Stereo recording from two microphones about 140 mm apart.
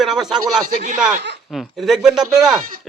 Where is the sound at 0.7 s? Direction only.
65° right (ahead or behind).